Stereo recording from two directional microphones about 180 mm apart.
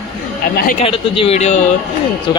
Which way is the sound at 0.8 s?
30° left (ahead or behind).